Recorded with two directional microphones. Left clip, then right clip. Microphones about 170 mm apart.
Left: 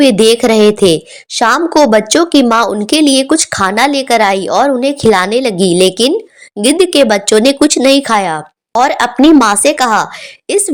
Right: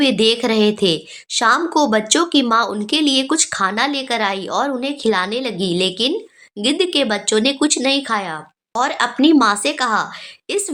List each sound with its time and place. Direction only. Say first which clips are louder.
0.0 s a woman's voice: left 8 dB; 35° left (ahead or behind)